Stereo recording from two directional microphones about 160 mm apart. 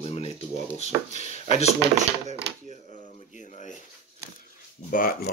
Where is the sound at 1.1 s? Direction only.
45° left (ahead or behind).